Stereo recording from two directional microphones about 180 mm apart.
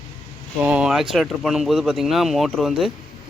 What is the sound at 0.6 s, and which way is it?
Speech, 5° right (ahead or behind).